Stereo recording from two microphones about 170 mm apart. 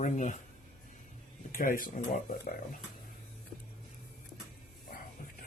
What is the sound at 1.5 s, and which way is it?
Speech, 55° left (ahead or behind).